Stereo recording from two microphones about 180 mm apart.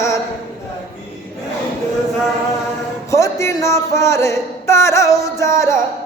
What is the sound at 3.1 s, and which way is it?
Speech, 15° left (ahead or behind).